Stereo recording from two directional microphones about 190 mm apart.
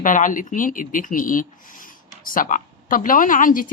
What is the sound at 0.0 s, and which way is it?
Speech, 45° left (ahead or behind).